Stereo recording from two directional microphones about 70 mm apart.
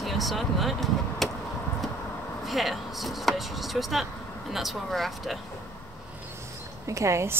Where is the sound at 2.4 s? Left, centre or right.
Centre.